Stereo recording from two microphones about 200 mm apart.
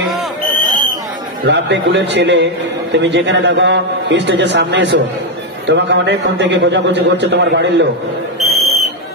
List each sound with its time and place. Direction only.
1.4 s a man's voice: 60° right (ahead or behind)
8.4 s fire alarm: centre (ahead or behind)